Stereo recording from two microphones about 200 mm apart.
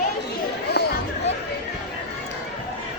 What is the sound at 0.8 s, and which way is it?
Chatter, 50° left (ahead or behind).